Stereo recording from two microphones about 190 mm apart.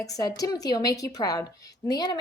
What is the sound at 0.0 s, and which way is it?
Speech, 20° left (ahead or behind).